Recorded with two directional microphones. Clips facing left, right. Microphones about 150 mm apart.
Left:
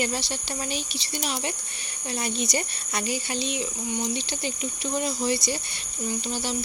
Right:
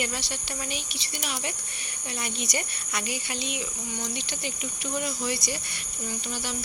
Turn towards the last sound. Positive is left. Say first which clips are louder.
# left 5 dB
turn(degrees=30)  # may be behind; listen again after turning